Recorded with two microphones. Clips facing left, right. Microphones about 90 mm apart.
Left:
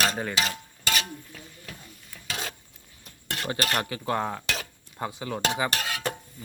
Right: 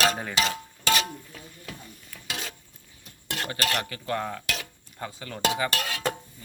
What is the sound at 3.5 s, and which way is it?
Speech, 25° left (ahead or behind).